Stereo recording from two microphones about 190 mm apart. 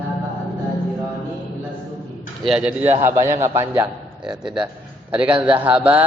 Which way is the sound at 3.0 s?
15° right (ahead or behind).